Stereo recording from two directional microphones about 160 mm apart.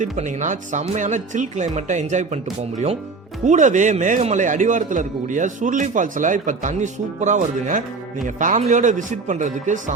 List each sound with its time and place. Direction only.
0.0 s a man's voice: 50° right (ahead or behind)